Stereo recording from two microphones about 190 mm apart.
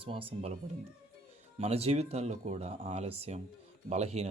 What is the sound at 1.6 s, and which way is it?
Speech, 30° right (ahead or behind).